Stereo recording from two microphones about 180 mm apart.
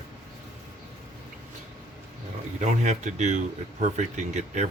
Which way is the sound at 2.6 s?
40° right (ahead or behind).